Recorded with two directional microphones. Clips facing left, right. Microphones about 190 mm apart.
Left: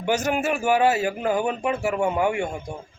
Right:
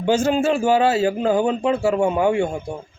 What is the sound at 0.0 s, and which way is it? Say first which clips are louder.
A man's voice: right 5 dB; 25° right (ahead or behind).